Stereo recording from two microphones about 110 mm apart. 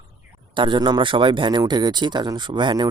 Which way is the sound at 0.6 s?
45° right (ahead or behind).